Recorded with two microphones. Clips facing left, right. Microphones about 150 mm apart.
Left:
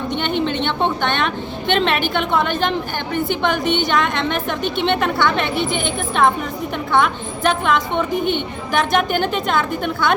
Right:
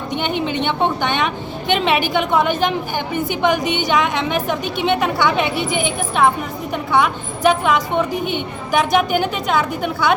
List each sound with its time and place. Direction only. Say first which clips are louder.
0.2 s a woman's voice: right 1 dB; 10° right (ahead or behind)